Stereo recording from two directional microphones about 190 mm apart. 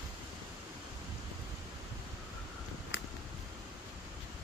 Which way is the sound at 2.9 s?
70° left (ahead or behind).